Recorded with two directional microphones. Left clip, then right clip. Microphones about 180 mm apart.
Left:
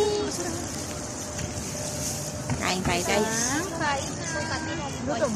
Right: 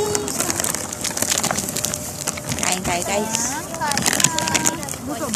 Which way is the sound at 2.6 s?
5° left (ahead or behind).